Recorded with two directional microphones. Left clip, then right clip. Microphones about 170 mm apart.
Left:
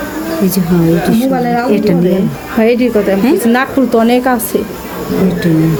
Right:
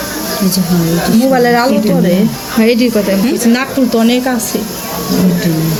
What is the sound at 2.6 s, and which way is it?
Speech, 10° left (ahead or behind).